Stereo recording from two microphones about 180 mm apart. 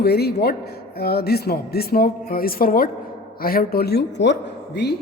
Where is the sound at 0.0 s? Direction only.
60° left (ahead or behind).